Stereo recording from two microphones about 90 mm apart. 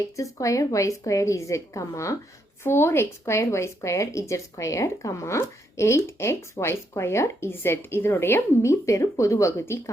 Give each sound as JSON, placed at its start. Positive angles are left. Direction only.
{"t": 0.2, "sound": "speech", "side_deg": 35}